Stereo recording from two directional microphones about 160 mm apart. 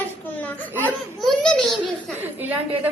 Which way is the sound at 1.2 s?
Centre (ahead or behind).